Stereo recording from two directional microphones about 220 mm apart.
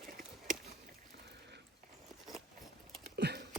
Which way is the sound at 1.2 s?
50° right (ahead or behind).